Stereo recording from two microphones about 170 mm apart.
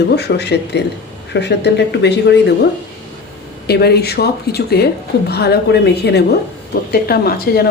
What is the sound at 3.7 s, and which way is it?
A woman's voice, 70° left (ahead or behind).